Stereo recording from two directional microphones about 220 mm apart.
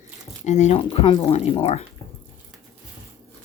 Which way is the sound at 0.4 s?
30° left (ahead or behind).